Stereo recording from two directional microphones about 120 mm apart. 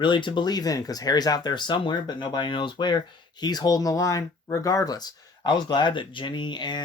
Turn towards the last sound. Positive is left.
turn(degrees=40)  # may be behind; listen again after turning